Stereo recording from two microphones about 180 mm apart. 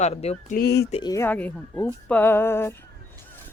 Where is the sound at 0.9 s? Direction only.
20° left (ahead or behind).